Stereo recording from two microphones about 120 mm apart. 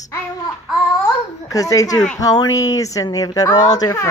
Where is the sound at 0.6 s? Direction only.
5° right (ahead or behind).